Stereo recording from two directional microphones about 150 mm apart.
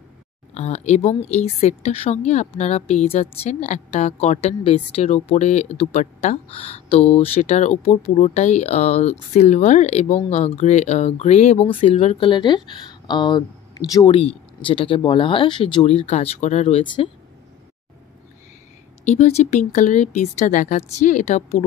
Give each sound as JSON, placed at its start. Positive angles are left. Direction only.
{"t": 0.6, "sound": "a woman's voice", "side_deg": 45}
{"t": 16.8, "sound": "speech", "side_deg": 30}
{"t": 19.0, "sound": "a woman's voice", "side_deg": 50}